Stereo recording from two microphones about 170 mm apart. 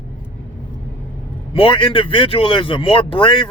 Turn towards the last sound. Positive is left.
turn(degrees=30)  # may be behind; listen again after turning